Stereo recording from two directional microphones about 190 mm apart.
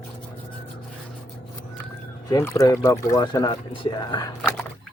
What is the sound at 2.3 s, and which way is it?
Speech, 15° left (ahead or behind).